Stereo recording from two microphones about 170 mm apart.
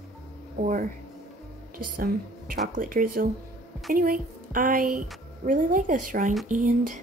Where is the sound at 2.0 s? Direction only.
60° right (ahead or behind).